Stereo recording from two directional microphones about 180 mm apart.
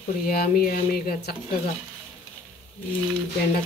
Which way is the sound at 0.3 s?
55° left (ahead or behind).